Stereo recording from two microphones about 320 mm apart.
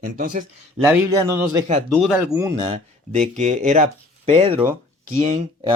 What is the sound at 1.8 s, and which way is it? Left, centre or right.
Speech, centre.